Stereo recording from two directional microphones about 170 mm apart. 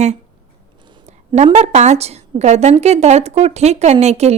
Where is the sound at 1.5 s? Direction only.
40° right (ahead or behind).